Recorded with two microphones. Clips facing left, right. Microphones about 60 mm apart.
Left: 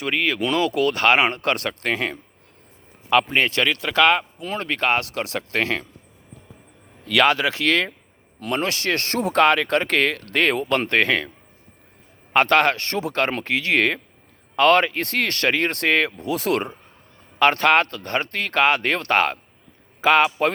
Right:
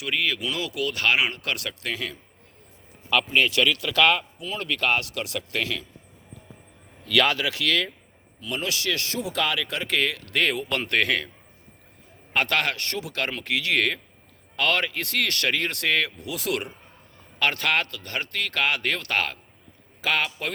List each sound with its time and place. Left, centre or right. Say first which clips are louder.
0.0 s speech: left 4 dB; left
3.3 s speech: left 1 dB; left
4.4 s speech: left 2 dB; left
7.1 s speech: left 4 dB; left
8.4 s speech: left 5 dB; left
12.3 s speech: left 7 dB; left